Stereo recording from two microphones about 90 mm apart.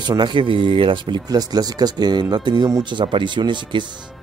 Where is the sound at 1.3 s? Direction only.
45° right (ahead or behind).